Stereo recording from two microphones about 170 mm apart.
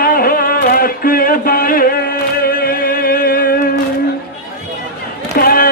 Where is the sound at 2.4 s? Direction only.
60° left (ahead or behind).